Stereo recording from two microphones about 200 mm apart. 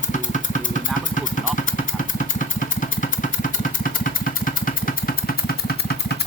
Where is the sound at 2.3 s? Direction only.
40° left (ahead or behind).